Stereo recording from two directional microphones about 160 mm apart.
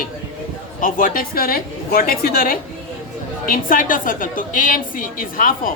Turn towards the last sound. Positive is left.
turn(degrees=60)  # may be behind; listen again after turning